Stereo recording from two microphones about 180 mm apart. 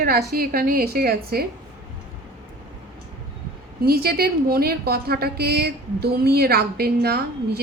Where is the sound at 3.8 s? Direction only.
60° right (ahead or behind).